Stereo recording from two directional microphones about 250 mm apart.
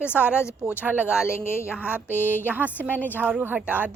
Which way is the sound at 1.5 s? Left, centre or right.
Centre.